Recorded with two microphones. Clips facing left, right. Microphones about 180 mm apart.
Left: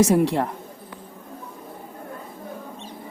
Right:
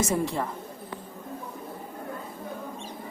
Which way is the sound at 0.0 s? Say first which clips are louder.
Left 9 dB; 75° left (ahead or behind).